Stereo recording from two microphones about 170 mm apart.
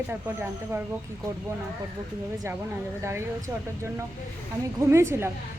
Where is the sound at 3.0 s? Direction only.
15° right (ahead or behind).